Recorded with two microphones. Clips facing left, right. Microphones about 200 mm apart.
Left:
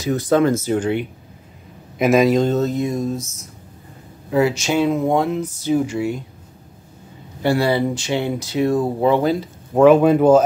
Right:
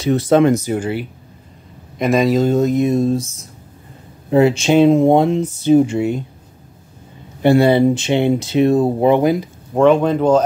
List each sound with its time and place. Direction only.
0.3 s speech: 20° right (ahead or behind)
4.3 s speech: 25° right (ahead or behind)
7.4 s speech: 20° right (ahead or behind)
9.8 s speech: 5° left (ahead or behind)